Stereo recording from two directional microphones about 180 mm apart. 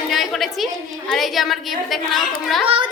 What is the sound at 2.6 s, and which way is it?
Speech, 30° right (ahead or behind).